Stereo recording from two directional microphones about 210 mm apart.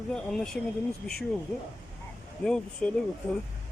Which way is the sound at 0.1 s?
5° left (ahead or behind).